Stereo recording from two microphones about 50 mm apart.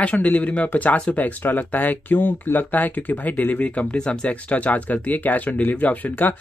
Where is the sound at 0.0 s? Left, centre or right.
Left.